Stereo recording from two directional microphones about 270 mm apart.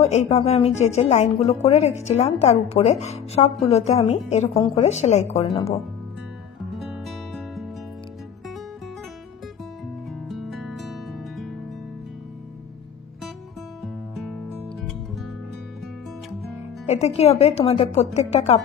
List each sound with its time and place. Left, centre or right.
0.0 s speech: left
6.7 s music: centre
10.2 s music: centre
14.1 s music: centre
16.8 s speech: left